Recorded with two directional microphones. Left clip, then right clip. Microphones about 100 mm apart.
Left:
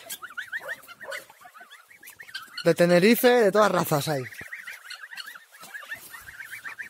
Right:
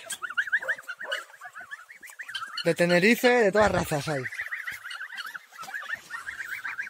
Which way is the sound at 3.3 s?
45° left (ahead or behind).